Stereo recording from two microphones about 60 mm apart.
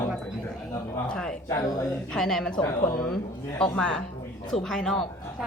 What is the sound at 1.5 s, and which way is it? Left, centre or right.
Speech, left.